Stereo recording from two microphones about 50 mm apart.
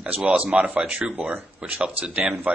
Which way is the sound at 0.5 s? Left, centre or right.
Right.